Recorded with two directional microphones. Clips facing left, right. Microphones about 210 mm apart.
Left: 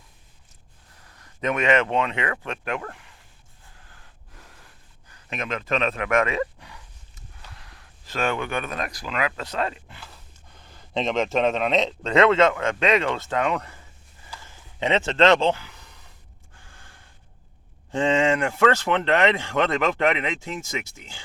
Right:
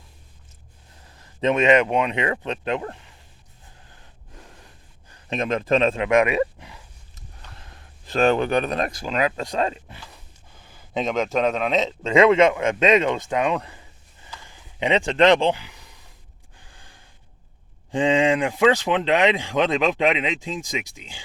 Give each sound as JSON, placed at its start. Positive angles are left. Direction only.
{"t": 1.0, "sound": "speech", "side_deg": -25}
{"t": 3.8, "sound": "gasp", "side_deg": -20}
{"t": 6.1, "sound": "a sound", "side_deg": -15}
{"t": 7.6, "sound": "speech", "side_deg": -25}
{"t": 10.6, "sound": "speech", "side_deg": -5}
{"t": 14.4, "sound": "a sound", "side_deg": -15}
{"t": 16.6, "sound": "gasp", "side_deg": -15}
{"t": 17.9, "sound": "speech", "side_deg": -15}